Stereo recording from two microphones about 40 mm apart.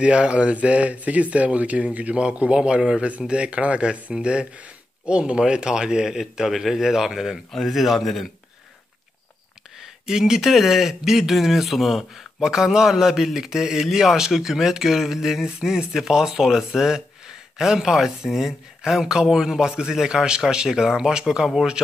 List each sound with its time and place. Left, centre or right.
0.0 s a man's voice: right; by 7.3 s centre
7.5 s speech: centre
9.8 s speech: centre
12.4 s a man's voice: centre